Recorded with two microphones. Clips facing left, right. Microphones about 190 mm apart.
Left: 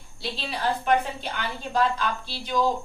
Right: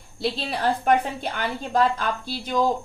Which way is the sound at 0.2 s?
50° right (ahead or behind).